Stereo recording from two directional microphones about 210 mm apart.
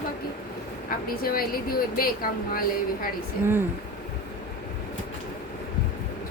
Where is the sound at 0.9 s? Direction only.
45° left (ahead or behind).